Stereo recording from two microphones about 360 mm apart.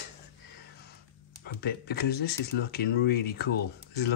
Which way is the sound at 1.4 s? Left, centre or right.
Left.